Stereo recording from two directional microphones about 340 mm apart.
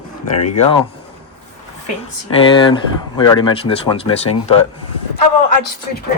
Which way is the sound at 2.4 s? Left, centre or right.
Centre.